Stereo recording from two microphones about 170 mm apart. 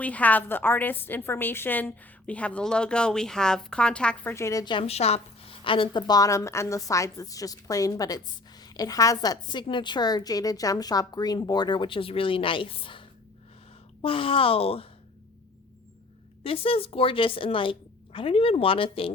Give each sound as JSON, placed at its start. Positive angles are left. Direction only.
{"t": 0.0, "sound": "a woman's voice", "side_deg": 10}
{"t": 16.4, "sound": "a woman's voice", "side_deg": 35}